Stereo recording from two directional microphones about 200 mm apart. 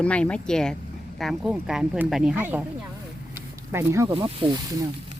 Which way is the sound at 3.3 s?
15° right (ahead or behind).